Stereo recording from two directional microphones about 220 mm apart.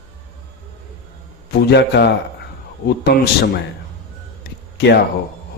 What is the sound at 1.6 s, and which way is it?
Speech, 50° left (ahead or behind).